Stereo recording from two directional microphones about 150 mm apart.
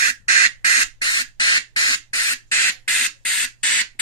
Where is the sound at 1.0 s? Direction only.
30° left (ahead or behind).